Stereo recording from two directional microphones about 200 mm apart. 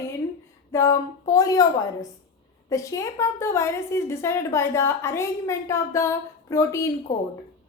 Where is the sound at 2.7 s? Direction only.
15° left (ahead or behind).